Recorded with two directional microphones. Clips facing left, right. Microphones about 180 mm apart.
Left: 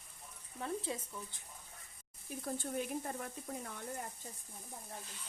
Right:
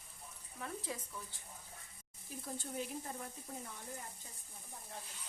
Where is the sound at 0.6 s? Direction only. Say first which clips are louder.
Left 4 dB; 25° left (ahead or behind).